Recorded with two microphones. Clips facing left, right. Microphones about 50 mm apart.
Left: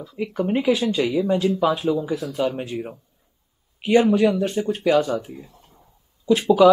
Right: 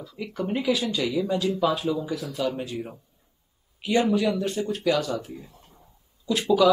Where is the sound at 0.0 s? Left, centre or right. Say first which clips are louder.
Left 6 dB; centre.